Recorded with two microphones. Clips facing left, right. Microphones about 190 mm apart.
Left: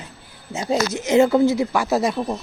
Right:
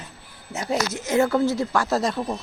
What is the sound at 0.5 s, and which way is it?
Speech, 20° left (ahead or behind).